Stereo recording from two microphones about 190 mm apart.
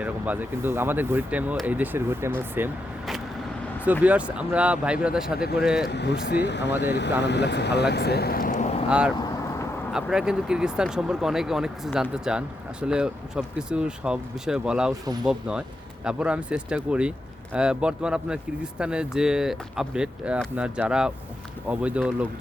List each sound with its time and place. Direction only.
0.0 s speech: 10° right (ahead or behind)
4.0 s speech: 5° right (ahead or behind)
5.9 s speech: 65° left (ahead or behind); by 8.7 s 40° left (ahead or behind)
8.9 s speech: 5° right (ahead or behind)
15.0 s speech: 20° right (ahead or behind)
15.3 s speech: 5° right (ahead or behind)